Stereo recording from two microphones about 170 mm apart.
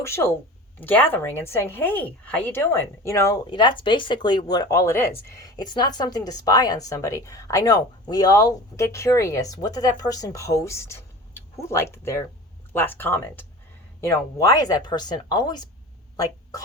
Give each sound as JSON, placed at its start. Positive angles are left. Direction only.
{"t": 0.0, "sound": "a woman's voice", "side_deg": 15}